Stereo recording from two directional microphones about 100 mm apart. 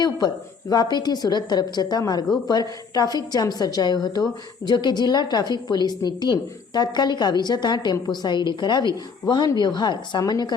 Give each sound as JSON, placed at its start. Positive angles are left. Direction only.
{"t": 0.7, "sound": "a woman's voice", "side_deg": 45}